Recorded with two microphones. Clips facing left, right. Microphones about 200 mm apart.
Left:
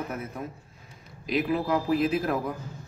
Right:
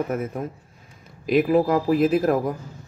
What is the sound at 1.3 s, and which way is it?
Speech, 50° right (ahead or behind).